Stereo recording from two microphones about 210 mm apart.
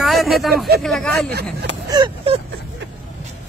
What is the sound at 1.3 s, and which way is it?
Speech, 50° right (ahead or behind).